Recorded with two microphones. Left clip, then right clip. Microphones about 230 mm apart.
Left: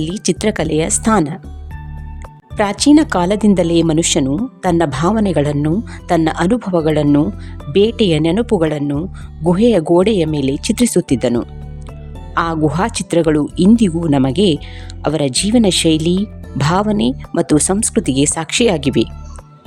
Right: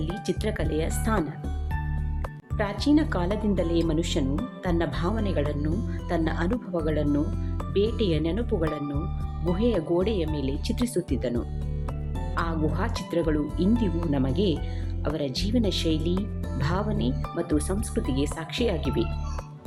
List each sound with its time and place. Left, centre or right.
0.0 s speech: left
2.6 s speech: left